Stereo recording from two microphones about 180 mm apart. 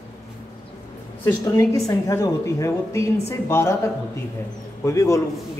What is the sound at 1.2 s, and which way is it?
Speech, 15° left (ahead or behind).